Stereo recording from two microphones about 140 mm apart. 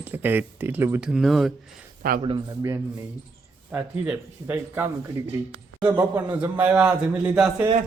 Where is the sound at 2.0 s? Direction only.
90° right.